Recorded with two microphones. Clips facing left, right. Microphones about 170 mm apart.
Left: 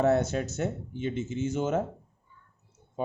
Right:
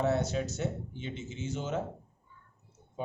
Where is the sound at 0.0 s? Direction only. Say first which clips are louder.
Left 5 dB; 50° left (ahead or behind).